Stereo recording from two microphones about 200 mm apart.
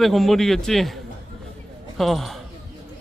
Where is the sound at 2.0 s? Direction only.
Centre (ahead or behind).